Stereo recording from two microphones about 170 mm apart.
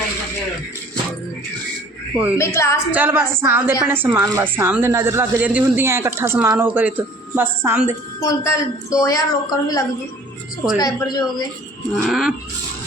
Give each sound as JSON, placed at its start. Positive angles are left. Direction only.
{"t": 2.4, "sound": "a woman's voice", "side_deg": 15}
{"t": 2.9, "sound": "a woman's voice", "side_deg": -10}
{"t": 8.2, "sound": "a woman's voice", "side_deg": 20}
{"t": 12.0, "sound": "speech", "side_deg": 0}